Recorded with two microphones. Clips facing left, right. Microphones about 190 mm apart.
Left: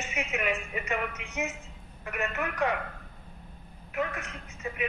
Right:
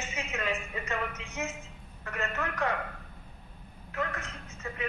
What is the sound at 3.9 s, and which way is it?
Speech, 15° left (ahead or behind).